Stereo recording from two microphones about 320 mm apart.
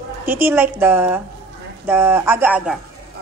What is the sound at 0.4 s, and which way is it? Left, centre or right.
A woman's voice, centre.